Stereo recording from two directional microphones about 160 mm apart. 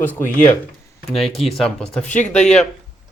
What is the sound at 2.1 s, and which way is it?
Speech, 50° left (ahead or behind).